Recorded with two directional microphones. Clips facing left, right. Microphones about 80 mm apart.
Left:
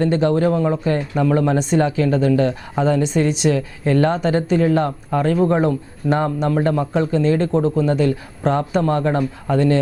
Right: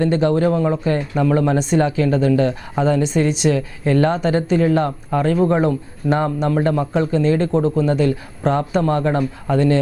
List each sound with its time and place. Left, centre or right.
0.0 s speech: centre